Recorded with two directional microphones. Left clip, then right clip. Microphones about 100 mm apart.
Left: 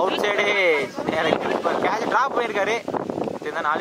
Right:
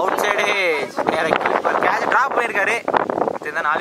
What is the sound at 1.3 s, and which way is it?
Speech, 45° right (ahead or behind).